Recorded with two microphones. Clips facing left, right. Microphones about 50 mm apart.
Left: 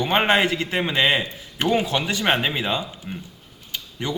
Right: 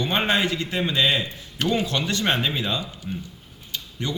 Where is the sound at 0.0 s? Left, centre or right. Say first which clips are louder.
Left 4 dB; left.